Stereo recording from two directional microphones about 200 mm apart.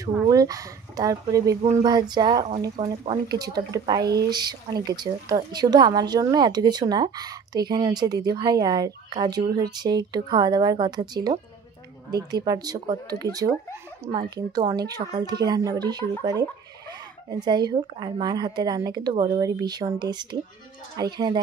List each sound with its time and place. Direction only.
0.3 s speech: 20° right (ahead or behind)
17.3 s speech: 20° right (ahead or behind)